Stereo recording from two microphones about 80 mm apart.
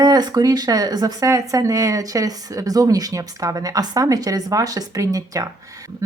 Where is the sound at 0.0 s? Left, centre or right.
Right.